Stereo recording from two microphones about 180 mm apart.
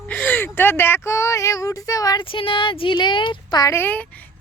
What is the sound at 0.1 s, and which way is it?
Speech, 10° left (ahead or behind).